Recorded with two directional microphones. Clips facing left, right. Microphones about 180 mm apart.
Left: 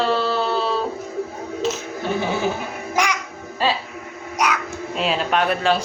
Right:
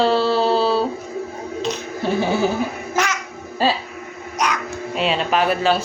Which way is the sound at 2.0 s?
30° right (ahead or behind).